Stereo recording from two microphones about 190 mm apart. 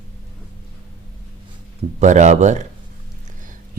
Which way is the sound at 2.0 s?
40° right (ahead or behind).